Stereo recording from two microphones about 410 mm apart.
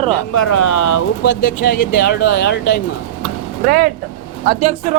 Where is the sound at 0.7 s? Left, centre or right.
Left.